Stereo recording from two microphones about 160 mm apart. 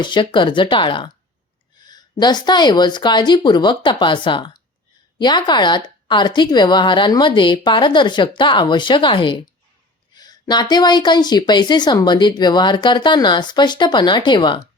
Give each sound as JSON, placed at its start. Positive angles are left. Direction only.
{"t": 0.0, "sound": "a woman's voice", "side_deg": 30}